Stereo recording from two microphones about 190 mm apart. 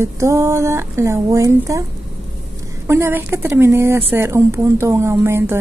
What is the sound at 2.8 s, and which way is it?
Speech, 15° right (ahead or behind).